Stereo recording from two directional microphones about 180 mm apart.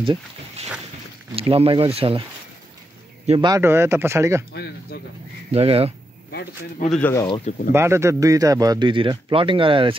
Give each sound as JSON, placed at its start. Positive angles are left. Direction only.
{"t": 0.0, "sound": "speech", "side_deg": -30}
{"t": 3.3, "sound": "speech", "side_deg": -25}
{"t": 4.5, "sound": "speech", "side_deg": 60}
{"t": 5.5, "sound": "speech", "side_deg": -35}
{"t": 6.9, "sound": "speech", "side_deg": 10}
{"t": 7.7, "sound": "speech", "side_deg": -15}